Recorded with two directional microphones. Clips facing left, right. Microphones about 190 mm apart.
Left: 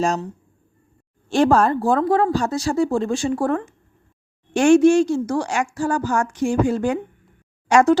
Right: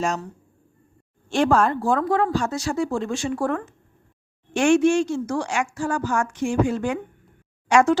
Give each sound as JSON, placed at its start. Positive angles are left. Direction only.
{"t": 1.3, "sound": "a woman's voice", "side_deg": 35}